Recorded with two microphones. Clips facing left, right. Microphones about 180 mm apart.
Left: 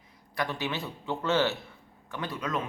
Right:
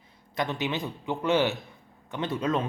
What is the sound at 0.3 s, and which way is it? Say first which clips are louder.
A man's voice: right 3 dB; 20° right (ahead or behind).